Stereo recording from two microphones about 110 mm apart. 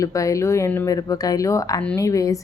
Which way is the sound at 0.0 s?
30° left (ahead or behind).